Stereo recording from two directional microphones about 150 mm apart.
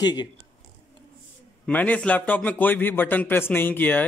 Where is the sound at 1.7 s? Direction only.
10° left (ahead or behind).